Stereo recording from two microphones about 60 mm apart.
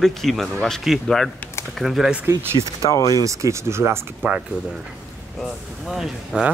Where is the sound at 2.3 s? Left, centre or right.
Right.